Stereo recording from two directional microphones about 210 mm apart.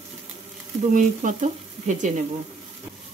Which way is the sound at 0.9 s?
35° right (ahead or behind).